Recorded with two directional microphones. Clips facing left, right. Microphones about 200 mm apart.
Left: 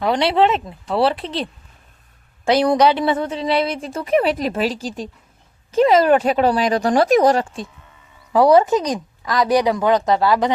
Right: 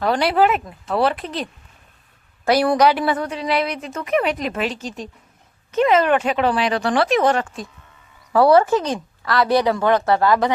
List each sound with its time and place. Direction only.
0.1 s a woman's voice: 25° left (ahead or behind)
2.4 s a woman's voice: 20° left (ahead or behind)
8.3 s speech: 15° left (ahead or behind)